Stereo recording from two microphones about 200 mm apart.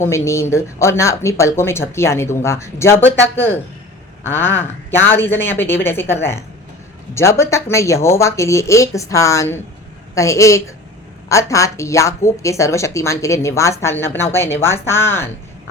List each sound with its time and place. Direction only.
0.0 s speech: 15° left (ahead or behind)